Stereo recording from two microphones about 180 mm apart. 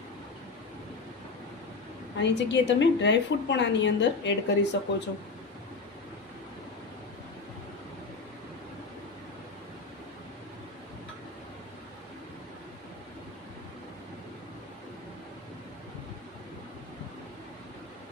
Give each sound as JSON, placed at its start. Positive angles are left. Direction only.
{"t": 2.1, "sound": "a woman's voice", "side_deg": 75}